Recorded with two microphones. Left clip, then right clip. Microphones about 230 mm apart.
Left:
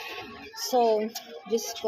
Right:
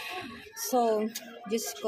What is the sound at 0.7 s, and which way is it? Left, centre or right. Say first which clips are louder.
Speech: left 3 dB; centre.